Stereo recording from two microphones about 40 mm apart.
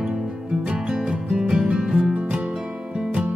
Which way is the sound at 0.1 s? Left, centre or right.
Right.